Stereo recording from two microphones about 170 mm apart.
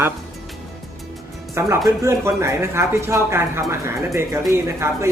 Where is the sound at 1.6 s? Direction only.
15° right (ahead or behind).